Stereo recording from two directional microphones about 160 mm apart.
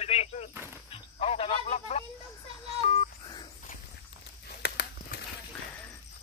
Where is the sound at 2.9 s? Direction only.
30° left (ahead or behind).